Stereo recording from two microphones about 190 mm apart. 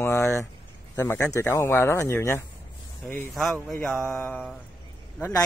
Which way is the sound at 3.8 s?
5° left (ahead or behind).